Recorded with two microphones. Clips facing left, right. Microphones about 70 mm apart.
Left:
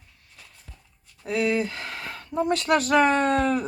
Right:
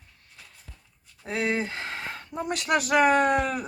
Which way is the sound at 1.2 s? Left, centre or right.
Right.